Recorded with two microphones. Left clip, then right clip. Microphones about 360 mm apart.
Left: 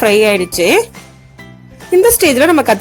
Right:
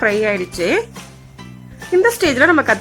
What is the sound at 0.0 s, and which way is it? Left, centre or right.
Speech, centre.